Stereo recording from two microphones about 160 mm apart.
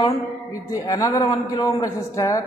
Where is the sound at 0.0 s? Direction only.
20° left (ahead or behind).